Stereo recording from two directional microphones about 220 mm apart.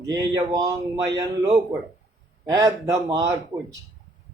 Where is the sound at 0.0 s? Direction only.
15° right (ahead or behind).